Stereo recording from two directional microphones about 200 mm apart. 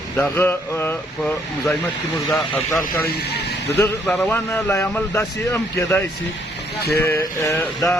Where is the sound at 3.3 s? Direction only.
55° left (ahead or behind).